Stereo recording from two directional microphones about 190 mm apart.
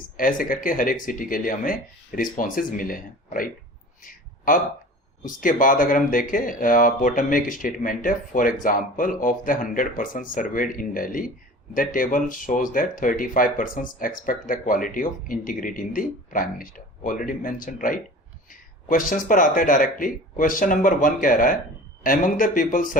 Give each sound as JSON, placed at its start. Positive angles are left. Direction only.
{"t": 0.2, "sound": "speech", "side_deg": 45}
{"t": 4.0, "sound": "a sound", "side_deg": 45}
{"t": 5.2, "sound": "speech", "side_deg": 45}